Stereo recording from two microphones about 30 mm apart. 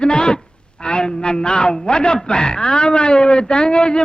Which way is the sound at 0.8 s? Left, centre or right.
Left.